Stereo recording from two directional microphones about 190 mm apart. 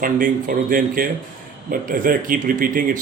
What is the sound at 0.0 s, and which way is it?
Speech, 45° right (ahead or behind).